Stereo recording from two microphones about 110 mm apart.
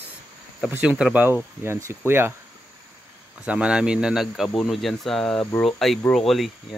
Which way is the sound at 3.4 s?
10° right (ahead or behind).